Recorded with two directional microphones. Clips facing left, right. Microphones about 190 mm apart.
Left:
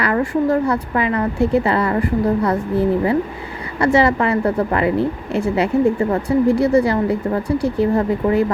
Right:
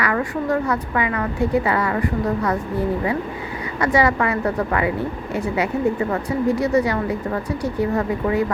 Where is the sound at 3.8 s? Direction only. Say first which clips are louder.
Left 3 dB; 30° left (ahead or behind).